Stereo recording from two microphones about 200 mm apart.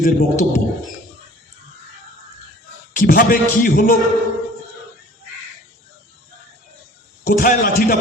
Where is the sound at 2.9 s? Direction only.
45° left (ahead or behind).